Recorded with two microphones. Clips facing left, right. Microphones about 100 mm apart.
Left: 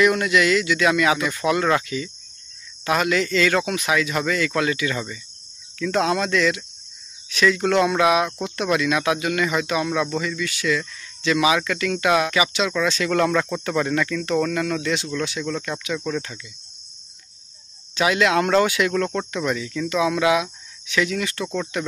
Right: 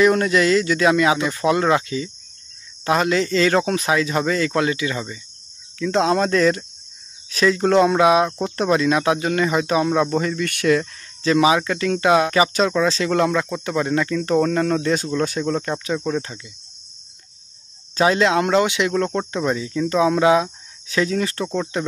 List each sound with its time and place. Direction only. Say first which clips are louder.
0.0 s speech: right 2 dB; 30° right (ahead or behind)
17.9 s speech: right 2 dB; 30° right (ahead or behind)